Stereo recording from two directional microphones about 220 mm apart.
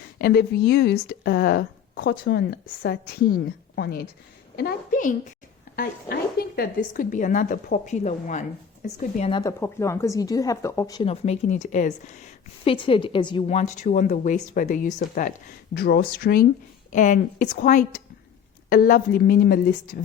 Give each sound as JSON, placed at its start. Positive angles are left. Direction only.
{"t": 0.2, "sound": "a woman's voice", "side_deg": 45}
{"t": 9.3, "sound": "a woman's voice", "side_deg": 15}
{"t": 12.6, "sound": "a woman's voice", "side_deg": 25}